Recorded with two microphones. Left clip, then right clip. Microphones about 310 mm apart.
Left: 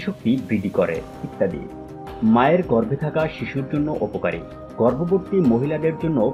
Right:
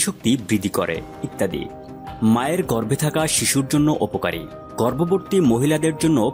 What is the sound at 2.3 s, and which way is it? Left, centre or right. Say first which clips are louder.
Speech: left 4 dB; right.